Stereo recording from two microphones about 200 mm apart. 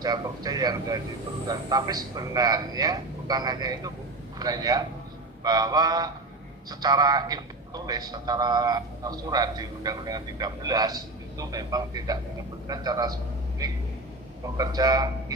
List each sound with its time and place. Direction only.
0.0 s a man's voice: 20° right (ahead or behind)
13.6 s music: 20° right (ahead or behind)
14.5 s a man's voice: 20° right (ahead or behind)